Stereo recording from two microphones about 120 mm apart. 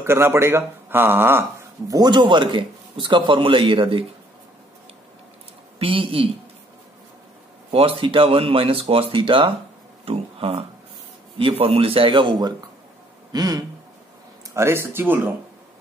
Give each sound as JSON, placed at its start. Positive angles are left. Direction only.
{"t": 0.0, "sound": "speech", "side_deg": -20}
{"t": 1.9, "sound": "a man's voice", "side_deg": -35}
{"t": 5.8, "sound": "a man's voice", "side_deg": -50}
{"t": 7.7, "sound": "a man's voice", "side_deg": -50}
{"t": 13.3, "sound": "a sound", "side_deg": -30}
{"t": 14.5, "sound": "speech", "side_deg": -20}